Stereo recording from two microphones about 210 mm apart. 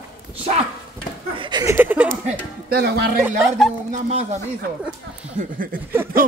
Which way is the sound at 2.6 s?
50° right (ahead or behind).